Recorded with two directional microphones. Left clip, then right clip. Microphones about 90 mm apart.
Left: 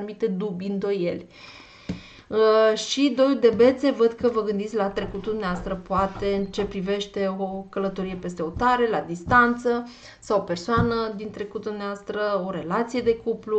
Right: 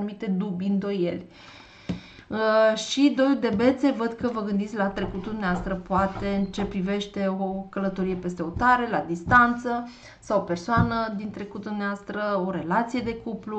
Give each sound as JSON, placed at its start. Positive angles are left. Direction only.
{"t": 0.0, "sound": "speech", "side_deg": 50}
{"t": 2.3, "sound": "a woman's voice", "side_deg": 45}